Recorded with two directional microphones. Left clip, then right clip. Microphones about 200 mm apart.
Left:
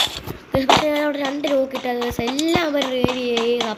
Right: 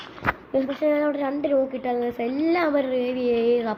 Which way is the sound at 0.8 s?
5° left (ahead or behind).